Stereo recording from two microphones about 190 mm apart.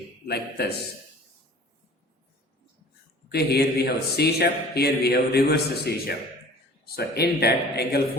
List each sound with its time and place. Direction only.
0.3 s a man's voice: 60° left (ahead or behind)
3.3 s a man's voice: 55° left (ahead or behind)